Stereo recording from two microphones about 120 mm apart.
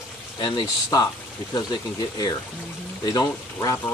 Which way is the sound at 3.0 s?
30° left (ahead or behind).